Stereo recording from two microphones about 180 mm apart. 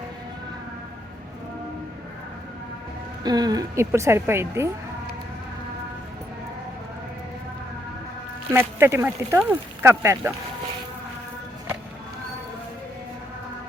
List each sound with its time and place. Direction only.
3.2 s speech: 20° right (ahead or behind)
8.5 s speech: 15° right (ahead or behind)